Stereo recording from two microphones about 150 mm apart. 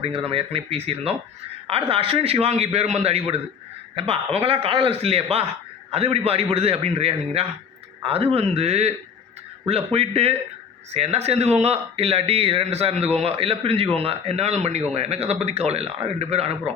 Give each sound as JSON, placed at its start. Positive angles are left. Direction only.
{"t": 0.3, "sound": "a man's voice", "side_deg": -40}